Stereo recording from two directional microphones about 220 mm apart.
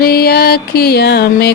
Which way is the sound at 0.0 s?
45° left (ahead or behind).